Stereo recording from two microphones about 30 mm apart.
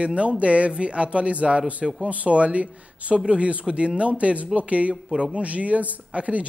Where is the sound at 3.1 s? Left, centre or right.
Right.